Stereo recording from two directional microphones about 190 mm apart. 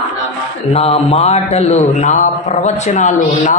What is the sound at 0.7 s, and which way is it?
Speech, 35° left (ahead or behind).